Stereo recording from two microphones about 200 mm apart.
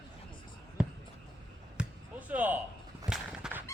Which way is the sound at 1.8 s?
5° right (ahead or behind).